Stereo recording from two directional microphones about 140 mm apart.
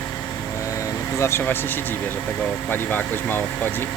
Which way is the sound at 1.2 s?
20° left (ahead or behind).